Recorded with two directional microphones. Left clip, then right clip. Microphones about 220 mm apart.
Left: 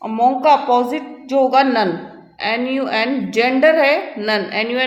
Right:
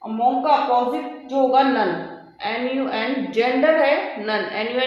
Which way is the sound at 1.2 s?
50° left (ahead or behind).